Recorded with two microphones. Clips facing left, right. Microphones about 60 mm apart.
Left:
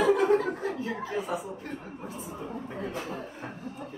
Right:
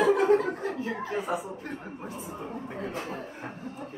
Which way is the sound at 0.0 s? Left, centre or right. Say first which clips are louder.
Right 1 dB; right.